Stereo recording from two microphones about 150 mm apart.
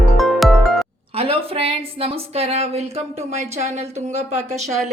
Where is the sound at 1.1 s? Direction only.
40° right (ahead or behind).